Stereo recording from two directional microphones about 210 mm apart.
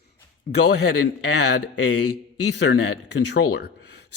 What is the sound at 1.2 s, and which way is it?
Speech, 55° left (ahead or behind).